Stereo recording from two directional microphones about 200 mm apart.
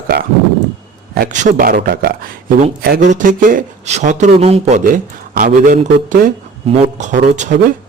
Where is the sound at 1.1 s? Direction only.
45° right (ahead or behind).